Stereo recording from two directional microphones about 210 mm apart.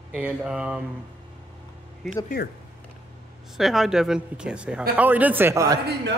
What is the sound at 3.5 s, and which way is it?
A man's voice, centre (ahead or behind).